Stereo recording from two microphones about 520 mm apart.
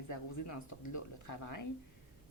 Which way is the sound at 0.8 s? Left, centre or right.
Left.